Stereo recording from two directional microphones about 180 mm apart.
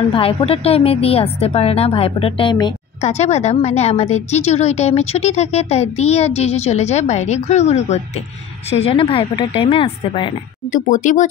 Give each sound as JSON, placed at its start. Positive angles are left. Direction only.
{"t": 0.1, "sound": "a woman's voice", "side_deg": 30}
{"t": 3.0, "sound": "a woman's voice", "side_deg": 40}
{"t": 10.7, "sound": "speech", "side_deg": 45}